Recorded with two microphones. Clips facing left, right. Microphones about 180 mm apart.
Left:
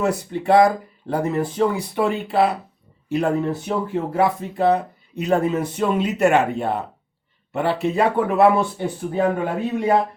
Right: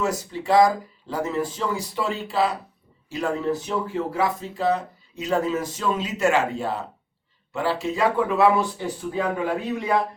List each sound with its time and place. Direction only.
0.0 s speech: 60° left (ahead or behind)